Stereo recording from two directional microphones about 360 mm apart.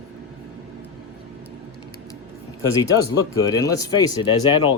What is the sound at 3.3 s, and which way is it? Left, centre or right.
Speech, centre.